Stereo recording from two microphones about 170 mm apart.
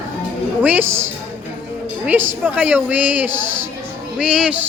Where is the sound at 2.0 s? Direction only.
10° right (ahead or behind).